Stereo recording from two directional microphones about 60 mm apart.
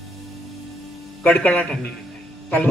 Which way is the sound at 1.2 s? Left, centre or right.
Left.